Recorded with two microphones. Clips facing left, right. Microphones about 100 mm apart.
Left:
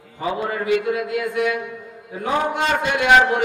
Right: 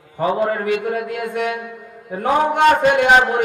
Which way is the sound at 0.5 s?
45° right (ahead or behind).